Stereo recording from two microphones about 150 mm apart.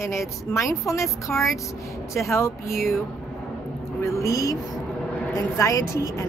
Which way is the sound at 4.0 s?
20° left (ahead or behind).